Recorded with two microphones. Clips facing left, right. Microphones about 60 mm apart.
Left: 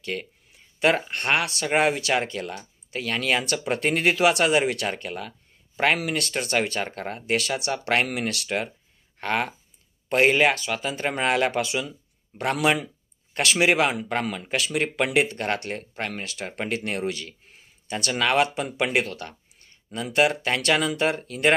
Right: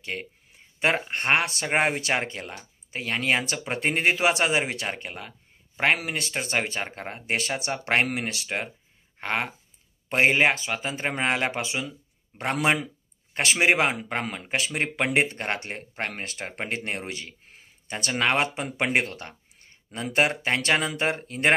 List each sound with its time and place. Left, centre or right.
0.0 s speech: right
16.1 s speech: right